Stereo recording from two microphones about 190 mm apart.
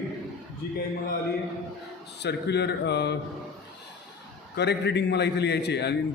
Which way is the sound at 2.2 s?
60° left (ahead or behind).